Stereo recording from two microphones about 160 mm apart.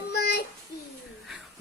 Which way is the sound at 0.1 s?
90° left.